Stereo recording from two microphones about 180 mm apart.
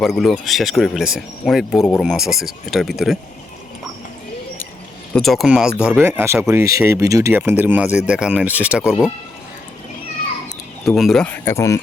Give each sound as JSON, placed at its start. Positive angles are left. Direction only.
{"t": 0.0, "sound": "speech", "side_deg": 0}
{"t": 5.1, "sound": "speech", "side_deg": 0}
{"t": 10.8, "sound": "speech", "side_deg": 0}